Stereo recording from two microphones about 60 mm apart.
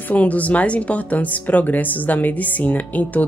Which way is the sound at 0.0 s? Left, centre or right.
Left.